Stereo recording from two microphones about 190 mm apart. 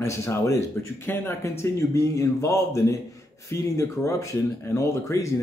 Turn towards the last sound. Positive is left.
turn(degrees=15)  # may be behind; listen again after turning